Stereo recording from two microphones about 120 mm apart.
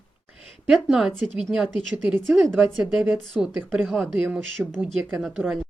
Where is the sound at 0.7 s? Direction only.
5° right (ahead or behind).